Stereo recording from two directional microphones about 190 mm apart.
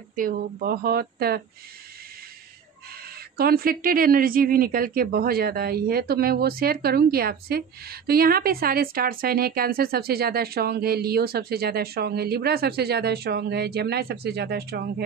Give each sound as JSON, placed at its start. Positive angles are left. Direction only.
{"t": 0.1, "sound": "speech", "side_deg": -50}
{"t": 3.3, "sound": "speech", "side_deg": -55}